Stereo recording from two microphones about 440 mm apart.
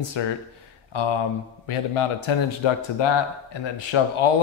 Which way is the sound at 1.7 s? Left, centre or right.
Left.